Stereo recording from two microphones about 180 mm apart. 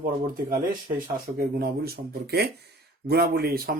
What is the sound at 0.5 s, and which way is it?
Speech, 50° right (ahead or behind).